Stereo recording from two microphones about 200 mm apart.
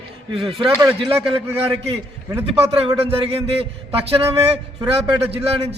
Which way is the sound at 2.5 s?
30° right (ahead or behind).